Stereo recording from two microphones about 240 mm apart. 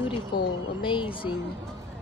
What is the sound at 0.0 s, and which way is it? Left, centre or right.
Speech, left.